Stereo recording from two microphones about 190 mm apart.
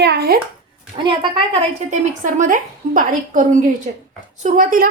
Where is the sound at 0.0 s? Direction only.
60° right (ahead or behind).